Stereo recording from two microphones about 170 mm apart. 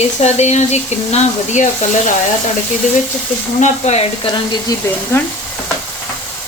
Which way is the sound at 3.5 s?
45° left (ahead or behind).